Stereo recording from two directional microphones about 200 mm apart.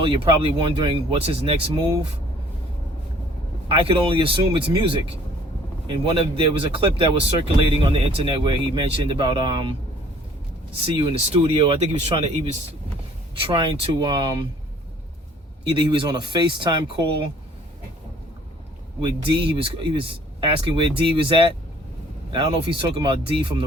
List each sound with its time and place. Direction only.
0.0 s speech: 25° right (ahead or behind)
3.7 s speech: 25° right (ahead or behind)
10.9 s speech: 25° right (ahead or behind)
13.4 s speech: 25° right (ahead or behind)
15.7 s speech: 25° right (ahead or behind)
19.0 s speech: 25° right (ahead or behind)